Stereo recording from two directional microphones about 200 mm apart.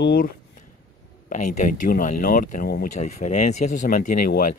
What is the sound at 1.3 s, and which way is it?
Speech, 40° left (ahead or behind).